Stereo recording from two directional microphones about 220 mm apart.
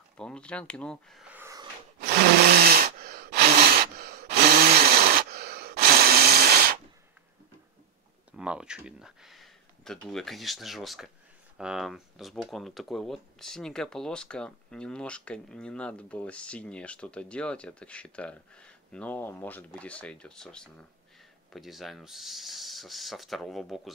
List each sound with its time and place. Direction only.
0.2 s speech: 5° left (ahead or behind); by 1.7 s 15° right (ahead or behind)
2.0 s a sound: 45° right (ahead or behind)
8.3 s speech: 5° right (ahead or behind)